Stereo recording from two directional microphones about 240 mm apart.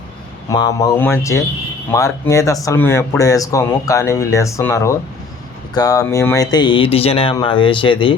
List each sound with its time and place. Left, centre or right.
0.5 s speech: centre